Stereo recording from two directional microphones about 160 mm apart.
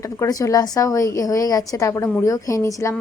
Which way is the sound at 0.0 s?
20° left (ahead or behind).